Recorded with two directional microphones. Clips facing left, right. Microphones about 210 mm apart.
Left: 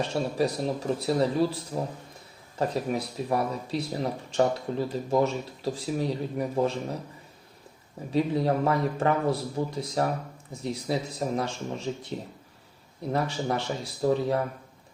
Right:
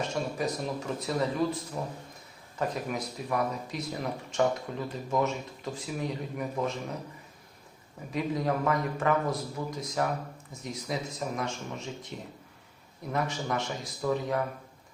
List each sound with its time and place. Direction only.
0.0 s speech: 35° left (ahead or behind)
8.1 s speech: 30° left (ahead or behind)